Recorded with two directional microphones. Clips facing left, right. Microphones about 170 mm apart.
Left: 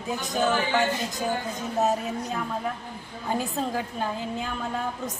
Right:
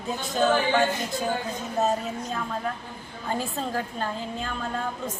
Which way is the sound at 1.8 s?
15° left (ahead or behind).